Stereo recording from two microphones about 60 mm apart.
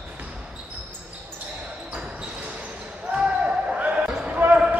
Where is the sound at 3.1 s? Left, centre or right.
Centre.